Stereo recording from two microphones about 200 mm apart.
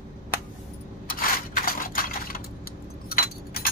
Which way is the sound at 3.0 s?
50° left (ahead or behind).